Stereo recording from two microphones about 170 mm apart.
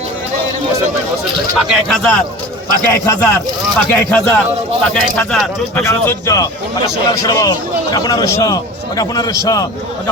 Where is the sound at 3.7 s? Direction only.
5° left (ahead or behind).